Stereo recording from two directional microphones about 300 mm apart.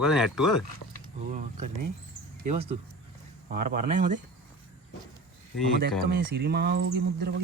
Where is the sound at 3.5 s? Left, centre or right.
Right.